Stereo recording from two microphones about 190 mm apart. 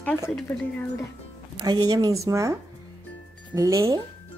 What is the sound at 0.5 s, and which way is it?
Speech, 15° left (ahead or behind).